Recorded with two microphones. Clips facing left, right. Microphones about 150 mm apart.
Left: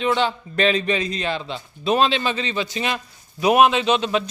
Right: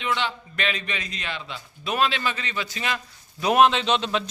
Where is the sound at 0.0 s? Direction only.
35° left (ahead or behind).